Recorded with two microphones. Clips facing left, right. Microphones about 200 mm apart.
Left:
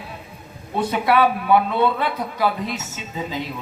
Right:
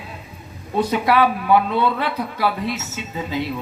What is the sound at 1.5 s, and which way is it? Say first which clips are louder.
A woman's voice: even; 55° left (ahead or behind).